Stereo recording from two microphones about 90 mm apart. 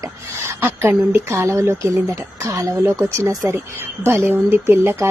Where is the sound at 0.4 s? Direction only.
30° right (ahead or behind).